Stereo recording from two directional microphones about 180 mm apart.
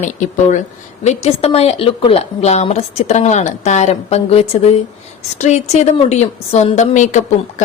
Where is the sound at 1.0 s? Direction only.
35° left (ahead or behind).